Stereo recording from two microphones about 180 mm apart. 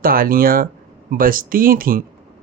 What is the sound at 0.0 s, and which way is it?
Speech, 55° right (ahead or behind).